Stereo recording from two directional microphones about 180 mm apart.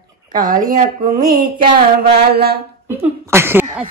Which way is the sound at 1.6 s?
60° right (ahead or behind).